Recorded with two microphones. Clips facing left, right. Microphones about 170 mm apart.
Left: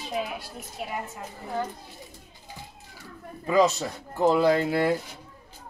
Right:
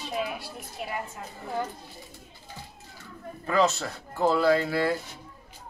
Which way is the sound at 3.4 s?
15° left (ahead or behind).